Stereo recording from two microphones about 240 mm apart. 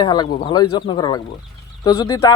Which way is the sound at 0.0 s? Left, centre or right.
Centre.